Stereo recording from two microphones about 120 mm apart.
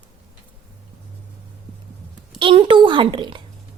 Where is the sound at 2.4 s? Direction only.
45° right (ahead or behind).